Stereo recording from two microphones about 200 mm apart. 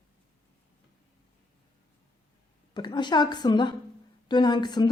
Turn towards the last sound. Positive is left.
turn(degrees=20)  # may be behind; listen again after turning